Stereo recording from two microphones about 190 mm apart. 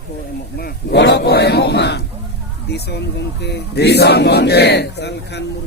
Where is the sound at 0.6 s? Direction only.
60° left (ahead or behind).